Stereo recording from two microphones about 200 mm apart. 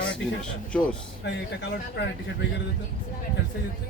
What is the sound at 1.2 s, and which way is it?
Speech, 60° left (ahead or behind).